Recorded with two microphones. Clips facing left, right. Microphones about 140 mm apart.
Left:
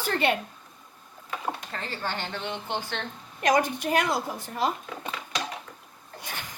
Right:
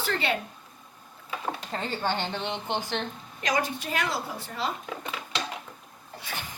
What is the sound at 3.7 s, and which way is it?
Speech, 50° left (ahead or behind).